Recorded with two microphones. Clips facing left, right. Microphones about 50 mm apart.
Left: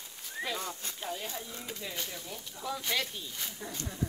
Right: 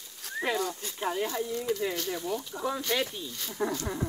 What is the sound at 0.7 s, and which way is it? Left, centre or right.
Speech, left.